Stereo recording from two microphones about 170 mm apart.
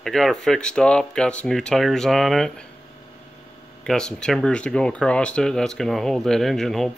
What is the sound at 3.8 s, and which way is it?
Speech, 5° left (ahead or behind).